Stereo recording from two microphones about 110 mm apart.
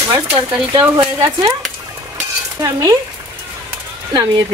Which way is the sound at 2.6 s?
30° right (ahead or behind).